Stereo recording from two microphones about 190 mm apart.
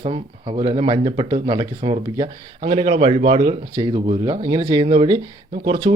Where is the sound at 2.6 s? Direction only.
35° right (ahead or behind).